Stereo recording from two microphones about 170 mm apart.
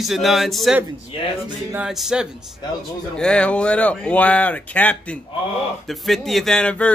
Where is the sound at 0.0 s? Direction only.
Centre (ahead or behind).